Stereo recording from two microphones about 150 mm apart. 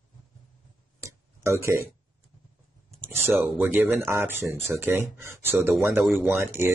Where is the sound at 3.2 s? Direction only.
15° right (ahead or behind).